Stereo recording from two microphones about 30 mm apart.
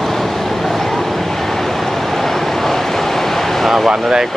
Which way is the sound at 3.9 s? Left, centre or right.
Centre.